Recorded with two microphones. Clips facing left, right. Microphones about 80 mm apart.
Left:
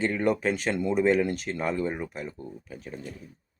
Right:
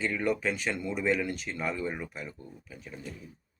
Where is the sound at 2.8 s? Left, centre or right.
Left.